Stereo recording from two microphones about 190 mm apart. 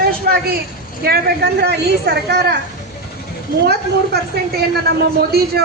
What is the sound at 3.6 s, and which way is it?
Speech, 55° right (ahead or behind).